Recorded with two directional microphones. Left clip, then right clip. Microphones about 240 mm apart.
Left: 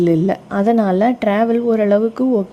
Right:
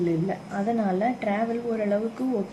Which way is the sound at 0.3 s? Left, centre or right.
Left.